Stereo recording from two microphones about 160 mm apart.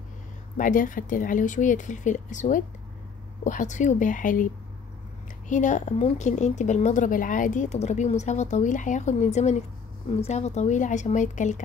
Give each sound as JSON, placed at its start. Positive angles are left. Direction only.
{"t": 0.6, "sound": "a woman's voice", "side_deg": 55}
{"t": 5.5, "sound": "a woman's voice", "side_deg": 50}